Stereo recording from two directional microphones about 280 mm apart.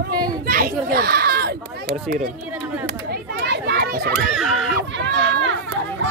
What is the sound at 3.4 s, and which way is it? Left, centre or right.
Children playing, right.